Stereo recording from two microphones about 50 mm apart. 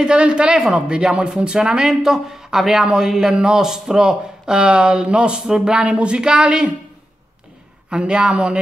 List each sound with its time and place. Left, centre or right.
0.0 s speech: centre
7.9 s speech: centre